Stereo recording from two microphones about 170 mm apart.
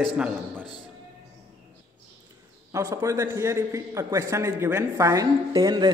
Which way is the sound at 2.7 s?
20° right (ahead or behind).